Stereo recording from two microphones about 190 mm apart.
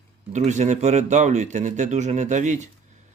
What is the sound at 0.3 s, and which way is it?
Speech, 35° right (ahead or behind).